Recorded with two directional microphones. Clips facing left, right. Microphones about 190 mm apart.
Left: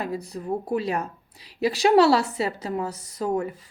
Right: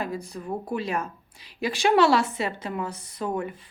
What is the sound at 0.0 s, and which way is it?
A woman's voice, 35° left (ahead or behind).